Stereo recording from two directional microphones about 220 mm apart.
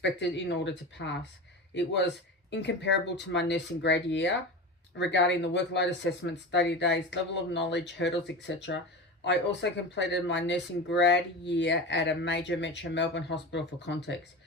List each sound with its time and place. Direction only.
0.0 s speech: 50° left (ahead or behind)